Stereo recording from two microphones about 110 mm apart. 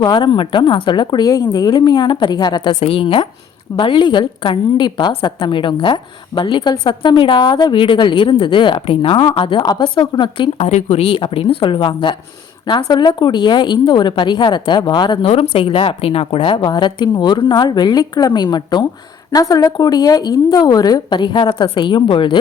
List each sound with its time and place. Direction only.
0.0 s a woman's voice: 45° left (ahead or behind)
2.8 s a woman's voice: 55° left (ahead or behind)
10.6 s speech: 90° left
11.2 s a woman's voice: 60° left (ahead or behind)
15.3 s a woman's voice: 60° left (ahead or behind)
16.6 s a woman's voice: 45° left (ahead or behind)